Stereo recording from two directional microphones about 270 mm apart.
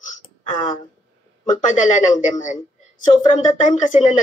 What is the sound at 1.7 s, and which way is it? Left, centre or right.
Speech, left.